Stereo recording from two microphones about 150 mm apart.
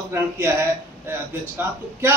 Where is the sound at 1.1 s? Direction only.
15° right (ahead or behind).